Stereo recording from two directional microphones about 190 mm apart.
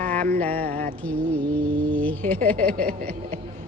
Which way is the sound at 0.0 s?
50° right (ahead or behind).